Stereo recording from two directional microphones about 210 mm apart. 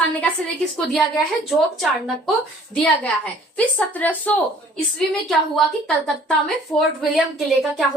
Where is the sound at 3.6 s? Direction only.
5° left (ahead or behind).